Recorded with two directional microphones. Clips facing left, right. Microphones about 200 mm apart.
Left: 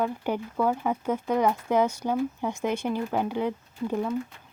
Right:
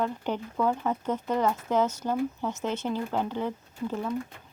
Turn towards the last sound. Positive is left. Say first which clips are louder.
# left 3 dB
turn(degrees=15)  # may be behind; listen again after turning